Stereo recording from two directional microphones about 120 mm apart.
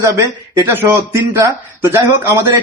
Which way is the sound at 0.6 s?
20° right (ahead or behind).